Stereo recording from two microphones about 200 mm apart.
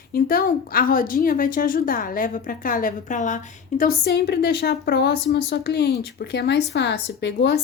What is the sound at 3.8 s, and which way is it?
A woman's voice, 55° left (ahead or behind).